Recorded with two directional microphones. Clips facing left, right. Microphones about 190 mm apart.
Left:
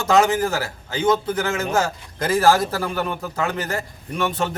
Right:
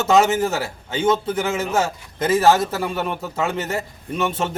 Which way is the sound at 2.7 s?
20° right (ahead or behind).